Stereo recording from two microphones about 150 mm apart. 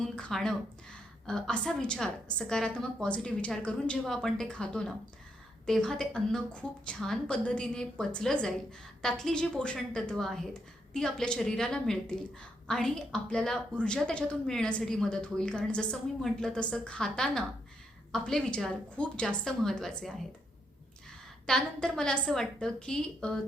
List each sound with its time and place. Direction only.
0.0 s a woman's voice: 5° left (ahead or behind)
21.4 s a woman's voice: 5° left (ahead or behind)